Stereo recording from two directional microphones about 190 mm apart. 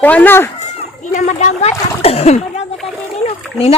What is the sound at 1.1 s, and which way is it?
Speech, 40° left (ahead or behind).